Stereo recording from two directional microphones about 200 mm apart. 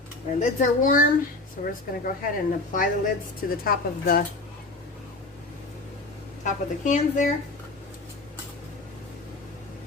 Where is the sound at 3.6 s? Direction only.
45° left (ahead or behind).